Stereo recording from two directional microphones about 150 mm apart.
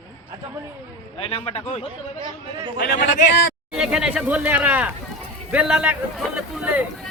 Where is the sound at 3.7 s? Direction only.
5° right (ahead or behind).